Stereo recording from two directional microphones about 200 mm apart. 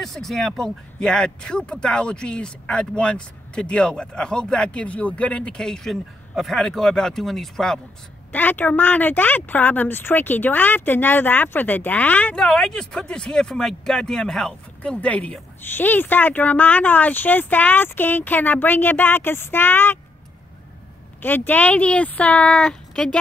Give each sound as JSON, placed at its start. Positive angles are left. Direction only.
{"t": 0.0, "sound": "a woman's voice", "side_deg": 0}
{"t": 21.2, "sound": "a woman's voice", "side_deg": 10}